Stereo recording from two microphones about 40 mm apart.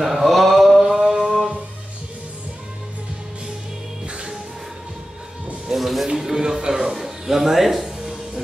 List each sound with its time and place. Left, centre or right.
0.0 s mantra: centre
4.0 s music: right
5.8 s music: centre
6.1 s a sound: centre